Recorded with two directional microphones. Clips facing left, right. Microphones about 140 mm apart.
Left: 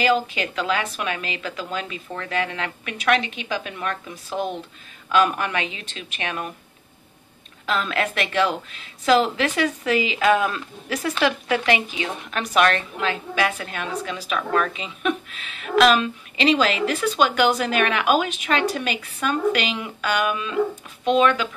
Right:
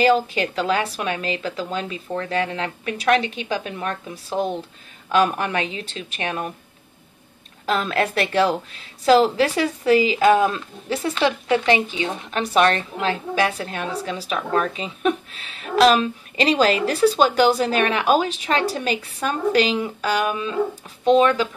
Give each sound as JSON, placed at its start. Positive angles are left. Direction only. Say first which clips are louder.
{"t": 0.0, "sound": "a woman's voice", "louder": "right 3 dB", "side_deg": -35}
{"t": 7.6, "sound": "a woman's voice", "louder": "right 3 dB", "side_deg": -40}